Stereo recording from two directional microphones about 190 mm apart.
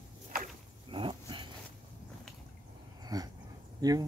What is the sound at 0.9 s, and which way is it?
Dog, 25° right (ahead or behind).